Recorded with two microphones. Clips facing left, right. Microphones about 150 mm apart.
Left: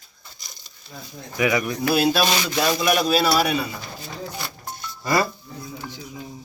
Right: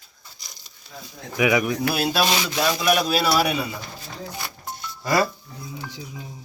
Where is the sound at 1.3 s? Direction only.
5° right (ahead or behind).